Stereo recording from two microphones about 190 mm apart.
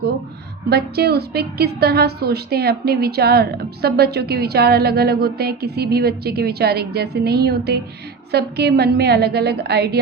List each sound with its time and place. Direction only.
0.7 s a woman's voice: 55° right (ahead or behind)